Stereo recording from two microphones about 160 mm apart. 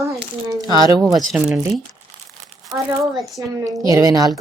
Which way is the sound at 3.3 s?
20° right (ahead or behind).